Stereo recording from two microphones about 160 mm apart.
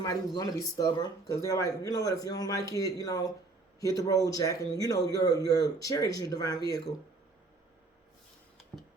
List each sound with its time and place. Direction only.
0.0 s a man's voice: 25° left (ahead or behind)